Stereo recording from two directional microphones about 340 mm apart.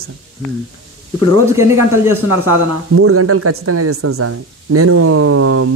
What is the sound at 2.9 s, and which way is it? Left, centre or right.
Speech, right.